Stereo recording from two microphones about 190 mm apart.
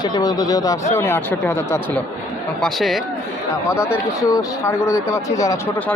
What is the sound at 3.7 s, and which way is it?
Speech, 15° left (ahead or behind).